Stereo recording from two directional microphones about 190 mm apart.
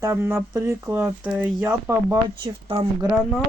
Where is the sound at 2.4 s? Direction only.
30° right (ahead or behind).